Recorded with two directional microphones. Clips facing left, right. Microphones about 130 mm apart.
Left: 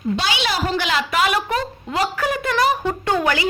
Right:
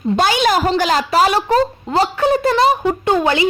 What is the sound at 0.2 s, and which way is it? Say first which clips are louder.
A woman's voice: right 8 dB; 45° right (ahead or behind).